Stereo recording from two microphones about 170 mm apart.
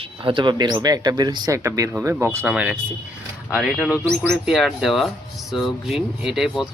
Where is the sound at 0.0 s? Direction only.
30° right (ahead or behind).